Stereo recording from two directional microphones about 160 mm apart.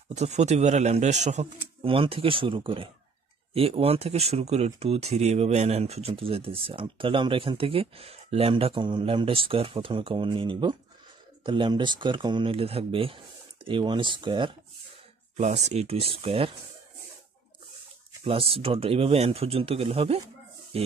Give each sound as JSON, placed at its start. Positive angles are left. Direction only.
{"t": 0.1, "sound": "a man's voice", "side_deg": -45}
{"t": 1.8, "sound": "speech", "side_deg": -35}
{"t": 15.3, "sound": "speech", "side_deg": -45}
{"t": 18.2, "sound": "speech", "side_deg": -35}